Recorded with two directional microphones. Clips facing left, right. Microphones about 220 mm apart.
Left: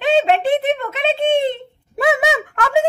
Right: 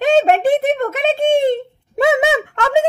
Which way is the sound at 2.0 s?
25° right (ahead or behind).